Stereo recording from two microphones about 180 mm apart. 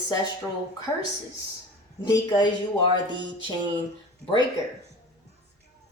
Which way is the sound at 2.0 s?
25° left (ahead or behind).